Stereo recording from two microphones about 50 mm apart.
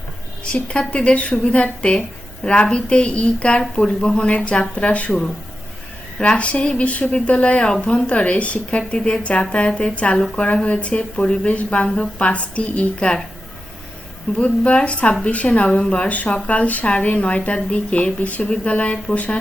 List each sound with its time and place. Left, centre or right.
0.5 s a woman's voice: left
6.1 s a woman's voice: left
14.3 s a woman's voice: left